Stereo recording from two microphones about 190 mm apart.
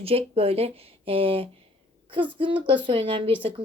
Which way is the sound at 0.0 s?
30° right (ahead or behind).